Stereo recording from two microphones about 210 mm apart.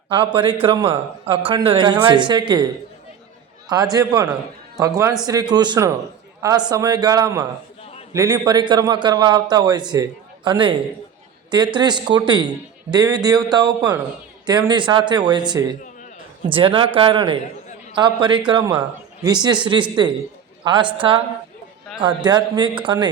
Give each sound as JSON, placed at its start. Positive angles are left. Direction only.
{"t": 0.1, "sound": "a man's voice", "side_deg": -25}
{"t": 3.9, "sound": "a man's voice", "side_deg": -15}